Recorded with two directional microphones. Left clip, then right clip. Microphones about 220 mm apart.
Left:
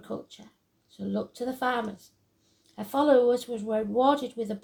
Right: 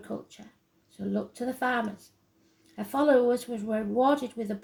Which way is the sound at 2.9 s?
25° left (ahead or behind).